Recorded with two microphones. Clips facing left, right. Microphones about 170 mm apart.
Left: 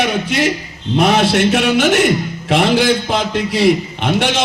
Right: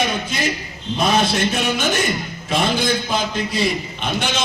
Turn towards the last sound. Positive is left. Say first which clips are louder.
# left 7 dB
turn(degrees=75)  # may be behind; listen again after turning